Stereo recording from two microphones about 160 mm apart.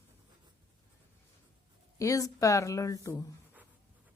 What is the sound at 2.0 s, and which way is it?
Speech, 20° left (ahead or behind).